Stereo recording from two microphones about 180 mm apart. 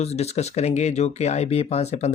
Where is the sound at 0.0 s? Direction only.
35° left (ahead or behind).